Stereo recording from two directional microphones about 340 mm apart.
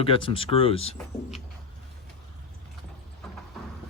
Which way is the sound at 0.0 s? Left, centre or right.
Centre.